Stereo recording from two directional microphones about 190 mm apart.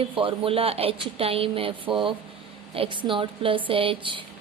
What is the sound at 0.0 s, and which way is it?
Speech, 30° right (ahead or behind).